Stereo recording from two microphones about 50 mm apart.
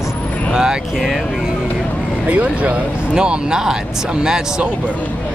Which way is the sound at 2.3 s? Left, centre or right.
Right.